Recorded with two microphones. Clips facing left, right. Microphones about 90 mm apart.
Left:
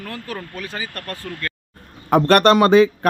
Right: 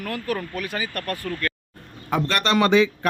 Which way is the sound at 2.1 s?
55° left (ahead or behind).